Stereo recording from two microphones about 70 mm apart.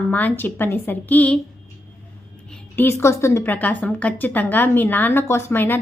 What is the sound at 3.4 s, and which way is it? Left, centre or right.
A woman's voice, left.